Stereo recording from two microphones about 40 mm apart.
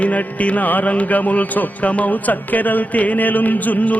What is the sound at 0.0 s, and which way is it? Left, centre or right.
Speech, left.